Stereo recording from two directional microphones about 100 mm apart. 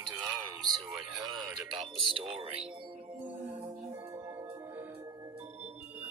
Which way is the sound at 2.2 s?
60° right (ahead or behind).